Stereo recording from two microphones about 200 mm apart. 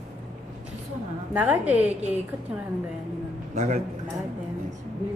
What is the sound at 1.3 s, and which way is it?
Speech, 10° right (ahead or behind).